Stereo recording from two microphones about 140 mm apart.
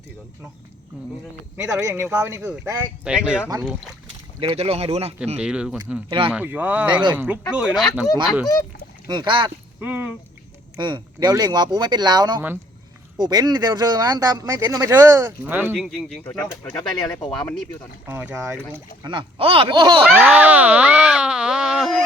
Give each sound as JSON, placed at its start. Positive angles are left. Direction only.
{"t": 0.9, "sound": "speech", "side_deg": -5}
{"t": 1.8, "sound": "speech", "side_deg": -20}
{"t": 4.4, "sound": "speech", "side_deg": -40}
{"t": 5.4, "sound": "speech", "side_deg": -5}
{"t": 6.1, "sound": "speech", "side_deg": -40}
{"t": 6.3, "sound": "speech", "side_deg": -10}
{"t": 9.0, "sound": "speech", "side_deg": -35}
{"t": 9.8, "sound": "speech", "side_deg": -15}
{"t": 10.8, "sound": "speech", "side_deg": -30}
{"t": 15.7, "sound": "speech", "side_deg": 0}
{"t": 16.5, "sound": "speech", "side_deg": 25}
{"t": 18.1, "sound": "speech", "side_deg": -15}
{"t": 19.0, "sound": "speech", "side_deg": -35}
{"t": 20.1, "sound": "speech", "side_deg": -10}